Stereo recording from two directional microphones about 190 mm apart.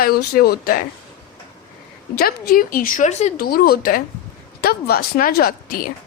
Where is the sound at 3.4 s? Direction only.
50° left (ahead or behind).